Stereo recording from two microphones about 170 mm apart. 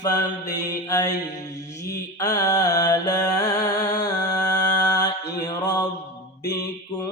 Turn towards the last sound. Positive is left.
turn(degrees=25)  # may be behind; listen again after turning